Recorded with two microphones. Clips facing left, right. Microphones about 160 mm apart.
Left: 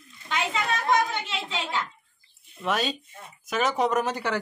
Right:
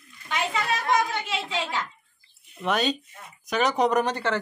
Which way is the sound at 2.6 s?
Centre (ahead or behind).